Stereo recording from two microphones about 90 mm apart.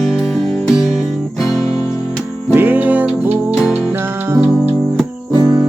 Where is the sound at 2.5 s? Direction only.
20° right (ahead or behind).